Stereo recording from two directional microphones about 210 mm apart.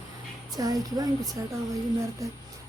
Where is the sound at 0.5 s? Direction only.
20° right (ahead or behind).